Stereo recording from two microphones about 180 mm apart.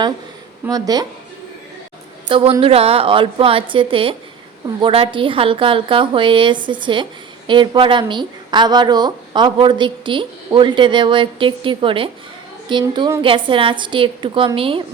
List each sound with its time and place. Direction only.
0.6 s a woman's voice: 20° right (ahead or behind)
2.3 s a woman's voice: 30° right (ahead or behind)